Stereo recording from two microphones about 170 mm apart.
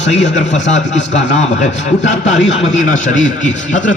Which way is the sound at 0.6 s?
45° left (ahead or behind).